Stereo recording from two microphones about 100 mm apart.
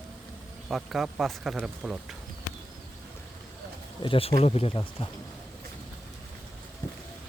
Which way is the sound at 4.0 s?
65° left (ahead or behind).